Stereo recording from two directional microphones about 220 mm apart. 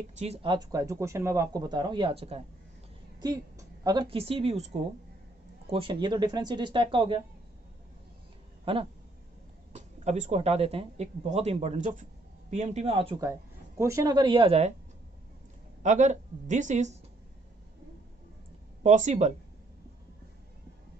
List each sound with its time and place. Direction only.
0.2 s a woman's voice: 25° right (ahead or behind)
8.7 s speech: 25° right (ahead or behind)
15.8 s a woman's voice: 35° right (ahead or behind)
18.8 s a woman's voice: 30° right (ahead or behind)